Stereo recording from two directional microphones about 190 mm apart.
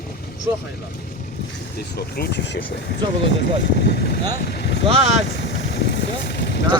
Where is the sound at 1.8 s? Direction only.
55° left (ahead or behind).